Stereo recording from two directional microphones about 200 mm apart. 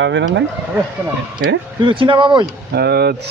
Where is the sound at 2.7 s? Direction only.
55° right (ahead or behind).